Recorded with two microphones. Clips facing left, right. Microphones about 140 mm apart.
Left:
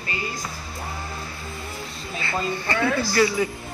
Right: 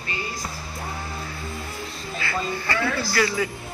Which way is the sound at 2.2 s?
20° left (ahead or behind).